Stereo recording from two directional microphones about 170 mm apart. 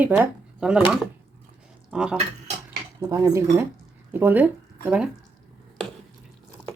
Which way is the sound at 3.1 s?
20° right (ahead or behind).